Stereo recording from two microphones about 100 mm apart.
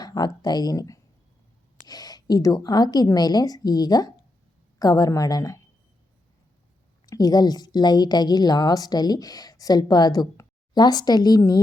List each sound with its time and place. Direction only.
0.0 s a woman's voice: 40° left (ahead or behind)
7.0 s a woman's voice: 40° left (ahead or behind)